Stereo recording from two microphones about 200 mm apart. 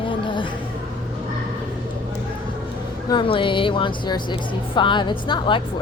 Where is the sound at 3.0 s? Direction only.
25° left (ahead or behind).